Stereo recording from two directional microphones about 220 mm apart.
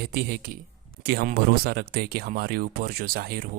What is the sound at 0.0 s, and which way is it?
Speech, 45° right (ahead or behind).